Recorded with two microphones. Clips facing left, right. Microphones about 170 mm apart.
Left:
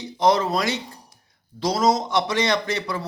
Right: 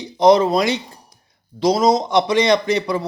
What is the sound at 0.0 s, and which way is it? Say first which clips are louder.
A man's voice: right 7 dB; 15° right (ahead or behind).